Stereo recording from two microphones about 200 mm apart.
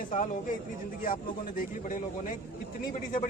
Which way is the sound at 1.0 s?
45° left (ahead or behind).